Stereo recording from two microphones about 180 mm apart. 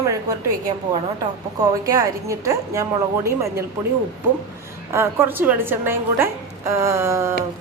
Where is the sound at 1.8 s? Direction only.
20° right (ahead or behind).